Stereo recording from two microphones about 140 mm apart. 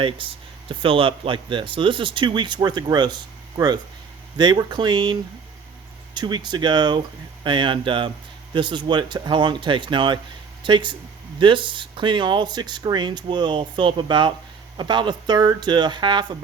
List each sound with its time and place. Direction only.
0.0 s speech: 40° right (ahead or behind)
4.4 s speech: 30° right (ahead or behind)
6.1 s speech: 30° right (ahead or behind)